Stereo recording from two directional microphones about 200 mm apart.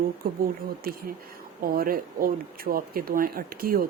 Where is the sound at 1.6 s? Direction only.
45° right (ahead or behind).